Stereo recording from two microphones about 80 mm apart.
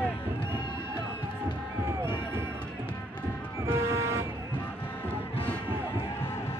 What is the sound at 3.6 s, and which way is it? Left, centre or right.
Vehicle, right.